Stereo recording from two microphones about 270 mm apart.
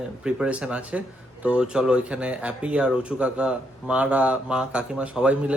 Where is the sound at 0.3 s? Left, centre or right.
Centre.